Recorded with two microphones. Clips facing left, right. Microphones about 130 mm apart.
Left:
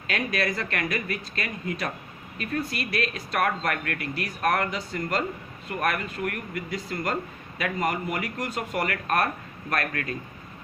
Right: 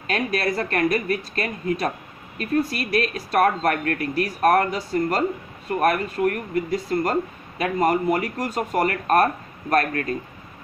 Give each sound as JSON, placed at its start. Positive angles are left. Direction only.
{"t": 0.1, "sound": "speech", "side_deg": -40}